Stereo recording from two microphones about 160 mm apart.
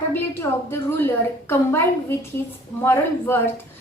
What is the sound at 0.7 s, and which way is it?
A woman's voice, 15° left (ahead or behind).